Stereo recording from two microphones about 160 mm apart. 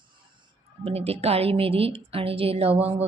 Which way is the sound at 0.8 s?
40° right (ahead or behind).